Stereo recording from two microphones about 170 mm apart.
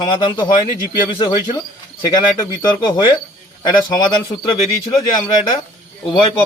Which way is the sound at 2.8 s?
25° left (ahead or behind).